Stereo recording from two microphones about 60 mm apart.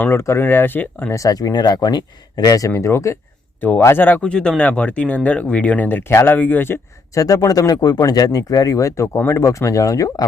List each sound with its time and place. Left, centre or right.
0.0 s speech: left
1.1 s speech: left
3.6 s speech: left
4.2 s speech: centre
6.1 s speech: left
7.2 s speech: left